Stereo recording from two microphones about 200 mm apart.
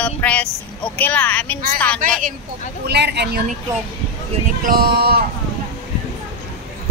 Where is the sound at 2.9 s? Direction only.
55° right (ahead or behind).